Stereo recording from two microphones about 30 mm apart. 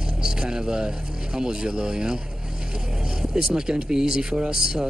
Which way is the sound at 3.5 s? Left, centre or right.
Right.